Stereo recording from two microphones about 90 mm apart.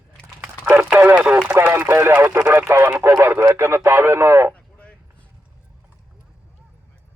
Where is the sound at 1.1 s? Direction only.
15° right (ahead or behind).